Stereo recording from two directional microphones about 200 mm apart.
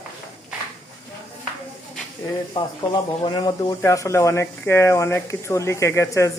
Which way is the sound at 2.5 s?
20° left (ahead or behind).